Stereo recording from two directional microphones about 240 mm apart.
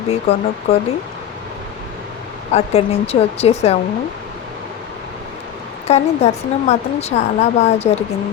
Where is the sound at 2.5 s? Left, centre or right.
Left.